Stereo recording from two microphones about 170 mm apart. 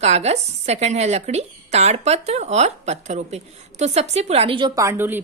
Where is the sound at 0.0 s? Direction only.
40° right (ahead or behind).